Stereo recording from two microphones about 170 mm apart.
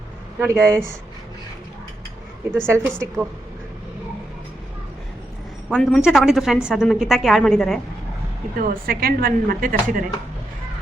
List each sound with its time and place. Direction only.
0.3 s speech: 15° right (ahead or behind)
2.6 s speech: 15° right (ahead or behind)
5.6 s a woman's voice: 5° left (ahead or behind)
8.5 s speech: 60° right (ahead or behind)